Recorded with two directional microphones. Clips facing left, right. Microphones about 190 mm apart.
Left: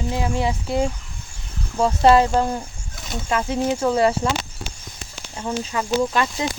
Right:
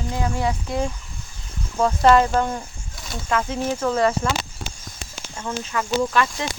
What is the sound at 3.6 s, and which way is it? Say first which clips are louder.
Speech: left 4 dB; 15° left (ahead or behind).